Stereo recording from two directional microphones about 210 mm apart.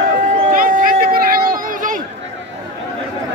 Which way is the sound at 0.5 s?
40° right (ahead or behind).